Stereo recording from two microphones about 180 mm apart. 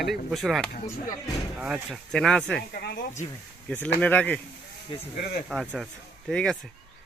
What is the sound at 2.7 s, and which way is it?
Speech, 65° left (ahead or behind).